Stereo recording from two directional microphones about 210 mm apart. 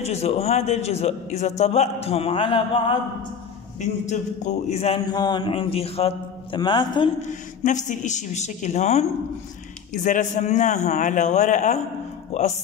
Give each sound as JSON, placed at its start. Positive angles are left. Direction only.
{"t": 0.0, "sound": "a man's voice", "side_deg": 30}
{"t": 7.2, "sound": "a man's voice", "side_deg": 35}
{"t": 10.0, "sound": "a man's voice", "side_deg": 35}